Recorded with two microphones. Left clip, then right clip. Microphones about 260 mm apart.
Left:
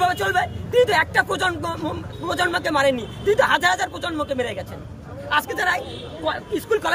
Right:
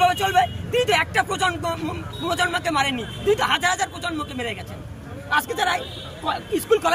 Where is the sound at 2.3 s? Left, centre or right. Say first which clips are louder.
Left 1 dB; centre.